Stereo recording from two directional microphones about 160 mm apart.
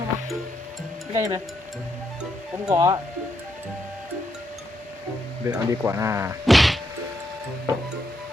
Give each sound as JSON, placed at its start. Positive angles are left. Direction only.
{"t": 1.1, "sound": "speech", "side_deg": -20}
{"t": 2.6, "sound": "speech", "side_deg": -20}
{"t": 5.5, "sound": "speech", "side_deg": -15}
{"t": 6.4, "sound": "whack", "side_deg": 0}